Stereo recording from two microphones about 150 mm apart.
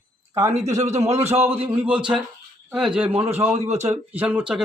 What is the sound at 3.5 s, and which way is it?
Speech, 45° right (ahead or behind).